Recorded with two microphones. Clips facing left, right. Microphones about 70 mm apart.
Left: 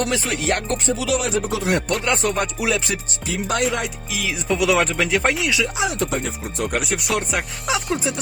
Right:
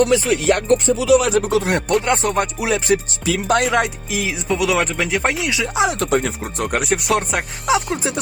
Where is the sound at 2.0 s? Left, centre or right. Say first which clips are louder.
Right 3 dB; right.